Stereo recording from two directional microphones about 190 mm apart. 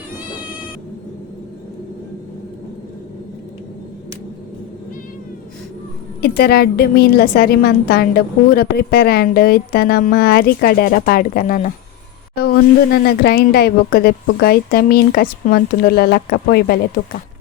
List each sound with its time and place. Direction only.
6.2 s a woman's voice: 55° left (ahead or behind)